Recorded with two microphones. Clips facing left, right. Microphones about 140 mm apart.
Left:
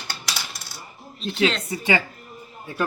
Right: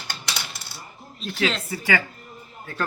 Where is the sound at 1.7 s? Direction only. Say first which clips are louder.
Left 2 dB; 20° left (ahead or behind).